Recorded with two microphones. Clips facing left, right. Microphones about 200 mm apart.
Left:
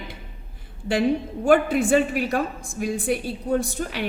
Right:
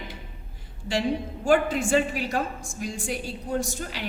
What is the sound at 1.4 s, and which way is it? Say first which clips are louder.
A woman's voice: left 4 dB; 55° left (ahead or behind).